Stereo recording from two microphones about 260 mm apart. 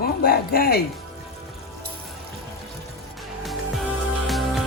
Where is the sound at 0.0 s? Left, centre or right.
Left.